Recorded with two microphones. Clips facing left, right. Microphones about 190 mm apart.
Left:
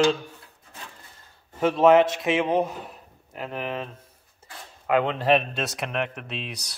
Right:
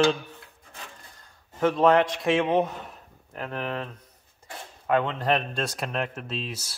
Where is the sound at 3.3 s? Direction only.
15° left (ahead or behind).